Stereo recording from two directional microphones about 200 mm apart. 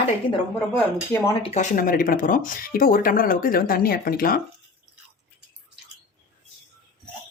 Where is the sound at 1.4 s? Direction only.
40° left (ahead or behind).